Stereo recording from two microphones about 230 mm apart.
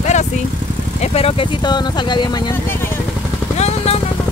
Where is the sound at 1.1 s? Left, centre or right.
Left.